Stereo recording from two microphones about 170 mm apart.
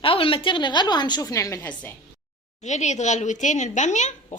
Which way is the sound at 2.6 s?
45° left (ahead or behind).